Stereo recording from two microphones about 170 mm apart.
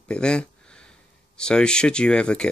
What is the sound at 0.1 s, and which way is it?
Speech, 5° left (ahead or behind).